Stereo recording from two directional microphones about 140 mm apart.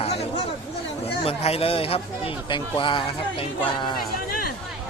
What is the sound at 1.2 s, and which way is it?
Speech, 45° left (ahead or behind).